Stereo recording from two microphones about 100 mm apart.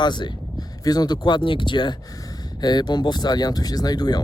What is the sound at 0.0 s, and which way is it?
Speech, 50° left (ahead or behind).